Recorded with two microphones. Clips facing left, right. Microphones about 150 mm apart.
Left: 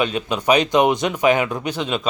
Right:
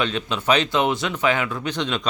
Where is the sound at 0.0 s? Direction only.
10° left (ahead or behind).